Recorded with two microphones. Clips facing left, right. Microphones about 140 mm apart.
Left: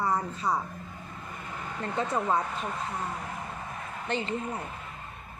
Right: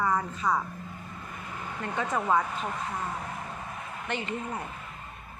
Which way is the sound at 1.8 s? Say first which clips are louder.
Left 1 dB; 35° left (ahead or behind).